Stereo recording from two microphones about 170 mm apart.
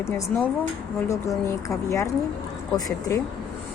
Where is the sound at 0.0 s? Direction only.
15° left (ahead or behind).